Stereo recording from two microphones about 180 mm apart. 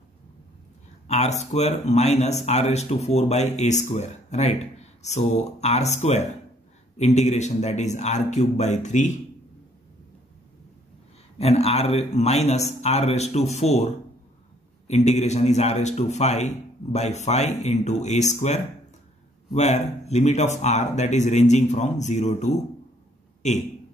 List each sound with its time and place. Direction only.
1.0 s speech: 40° left (ahead or behind)
11.3 s speech: 35° left (ahead or behind)